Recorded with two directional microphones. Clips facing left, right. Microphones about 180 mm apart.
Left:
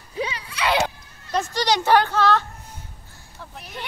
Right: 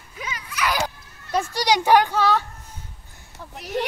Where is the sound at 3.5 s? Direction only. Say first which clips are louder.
Right 12 dB; 75° right (ahead or behind).